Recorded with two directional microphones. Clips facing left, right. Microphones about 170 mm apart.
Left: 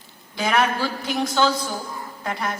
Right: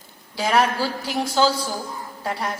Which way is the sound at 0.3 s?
35° right (ahead or behind).